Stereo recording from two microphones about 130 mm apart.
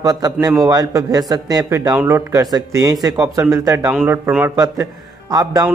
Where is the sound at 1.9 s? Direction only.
15° right (ahead or behind).